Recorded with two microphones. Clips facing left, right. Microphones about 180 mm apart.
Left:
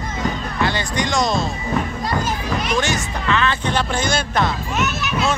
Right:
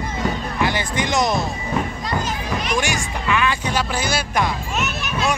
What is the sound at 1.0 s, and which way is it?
Music, 20° right (ahead or behind).